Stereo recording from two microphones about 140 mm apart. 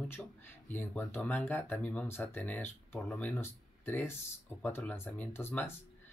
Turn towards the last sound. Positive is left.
turn(degrees=15)  # may be behind; listen again after turning